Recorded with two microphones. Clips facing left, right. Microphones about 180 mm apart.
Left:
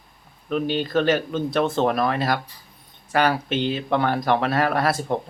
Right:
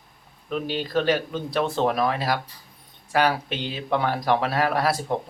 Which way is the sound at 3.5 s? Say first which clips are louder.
Left 7 dB; 55° left (ahead or behind).